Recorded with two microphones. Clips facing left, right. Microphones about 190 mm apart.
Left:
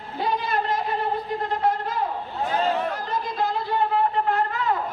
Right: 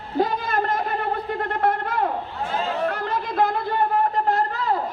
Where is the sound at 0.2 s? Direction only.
50° right (ahead or behind).